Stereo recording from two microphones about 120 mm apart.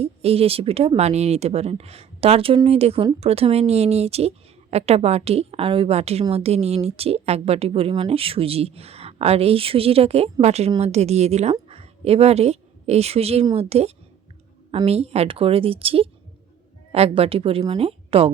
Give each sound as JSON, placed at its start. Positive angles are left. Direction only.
{"t": 0.0, "sound": "a woman's voice", "side_deg": -55}